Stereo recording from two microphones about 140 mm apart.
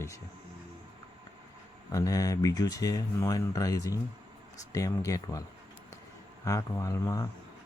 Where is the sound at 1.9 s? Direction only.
25° left (ahead or behind).